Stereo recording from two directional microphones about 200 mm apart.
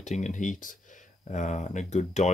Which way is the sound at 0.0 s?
35° left (ahead or behind).